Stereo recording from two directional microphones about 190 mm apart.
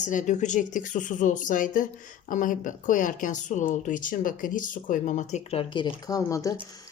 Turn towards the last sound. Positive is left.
turn(degrees=15)  # may be behind; listen again after turning